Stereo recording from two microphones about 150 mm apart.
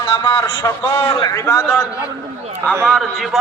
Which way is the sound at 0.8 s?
15° left (ahead or behind).